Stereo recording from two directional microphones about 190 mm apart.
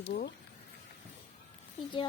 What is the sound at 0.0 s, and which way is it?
Speech, 55° left (ahead or behind).